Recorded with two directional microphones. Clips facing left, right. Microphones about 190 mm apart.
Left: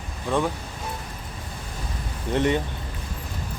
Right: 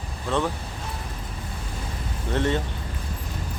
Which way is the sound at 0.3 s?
10° left (ahead or behind).